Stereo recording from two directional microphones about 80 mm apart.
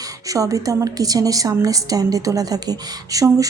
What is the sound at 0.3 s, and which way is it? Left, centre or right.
A woman's voice, right.